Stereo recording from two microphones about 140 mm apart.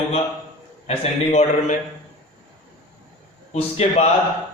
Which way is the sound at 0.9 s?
50° left (ahead or behind).